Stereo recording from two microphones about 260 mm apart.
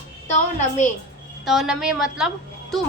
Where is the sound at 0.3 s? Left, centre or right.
Left.